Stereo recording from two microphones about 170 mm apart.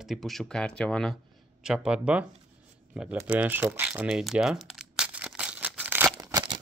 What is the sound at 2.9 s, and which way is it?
Typing, 10° right (ahead or behind).